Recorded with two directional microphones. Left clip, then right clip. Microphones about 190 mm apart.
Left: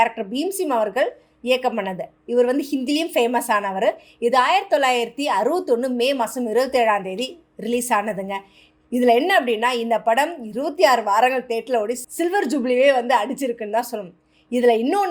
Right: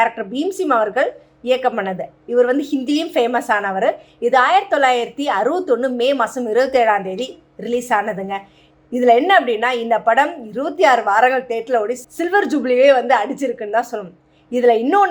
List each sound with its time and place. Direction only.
0.0 s a woman's voice: 30° left (ahead or behind)